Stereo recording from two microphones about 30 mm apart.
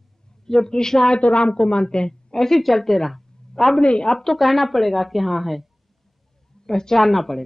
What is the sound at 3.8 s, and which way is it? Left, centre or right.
Speech, left.